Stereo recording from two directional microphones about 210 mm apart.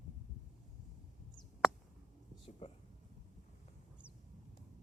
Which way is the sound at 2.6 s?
25° left (ahead or behind).